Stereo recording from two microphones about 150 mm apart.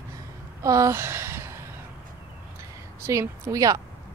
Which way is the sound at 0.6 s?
20° right (ahead or behind).